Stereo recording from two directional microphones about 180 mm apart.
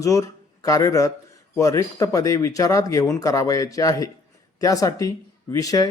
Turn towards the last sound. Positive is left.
turn(degrees=20)  # may be behind; listen again after turning